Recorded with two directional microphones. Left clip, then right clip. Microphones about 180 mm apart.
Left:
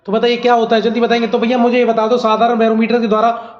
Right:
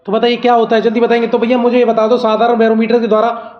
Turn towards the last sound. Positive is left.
turn(degrees=-40)  # may be behind; listen again after turning